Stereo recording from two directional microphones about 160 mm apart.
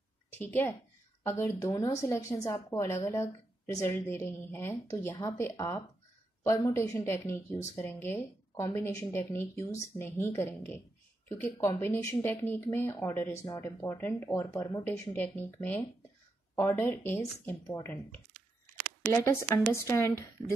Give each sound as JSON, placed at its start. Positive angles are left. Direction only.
{"t": 0.3, "sound": "a woman's voice", "side_deg": 15}
{"t": 19.2, "sound": "speech", "side_deg": 15}